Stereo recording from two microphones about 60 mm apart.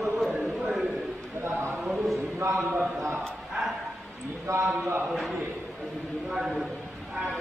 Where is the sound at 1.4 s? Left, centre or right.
Right.